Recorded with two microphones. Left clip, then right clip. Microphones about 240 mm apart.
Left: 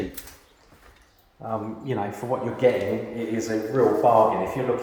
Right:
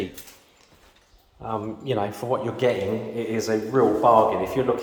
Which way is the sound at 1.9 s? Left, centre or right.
Centre.